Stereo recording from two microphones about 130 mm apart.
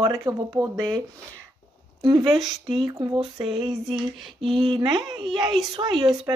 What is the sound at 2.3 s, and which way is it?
Speech, centre (ahead or behind).